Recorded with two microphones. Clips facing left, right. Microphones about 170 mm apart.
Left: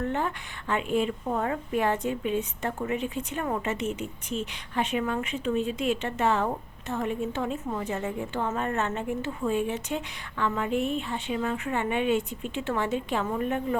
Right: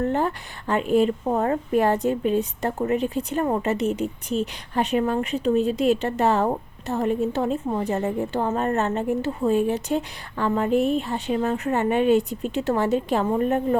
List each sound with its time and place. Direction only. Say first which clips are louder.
0.0 s speech: right 6 dB; 35° right (ahead or behind)